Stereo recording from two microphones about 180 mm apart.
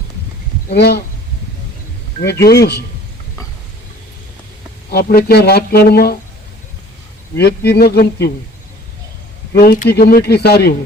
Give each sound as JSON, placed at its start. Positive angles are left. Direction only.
{"t": 0.7, "sound": "speech", "side_deg": 65}
{"t": 2.2, "sound": "speech", "side_deg": 65}
{"t": 4.9, "sound": "speech", "side_deg": 60}
{"t": 7.3, "sound": "speech", "side_deg": 65}
{"t": 9.6, "sound": "speech", "side_deg": 55}